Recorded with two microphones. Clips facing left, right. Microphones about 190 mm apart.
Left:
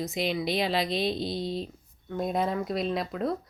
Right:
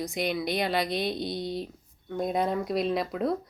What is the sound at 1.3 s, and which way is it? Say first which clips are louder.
Speech: left 1 dB; 25° left (ahead or behind).